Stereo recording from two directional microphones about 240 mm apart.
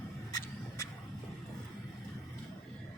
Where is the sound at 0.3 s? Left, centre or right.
Centre.